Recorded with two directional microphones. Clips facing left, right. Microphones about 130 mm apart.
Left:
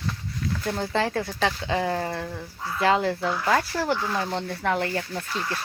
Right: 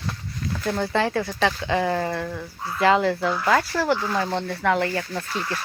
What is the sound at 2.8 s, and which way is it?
Speech, 40° right (ahead or behind).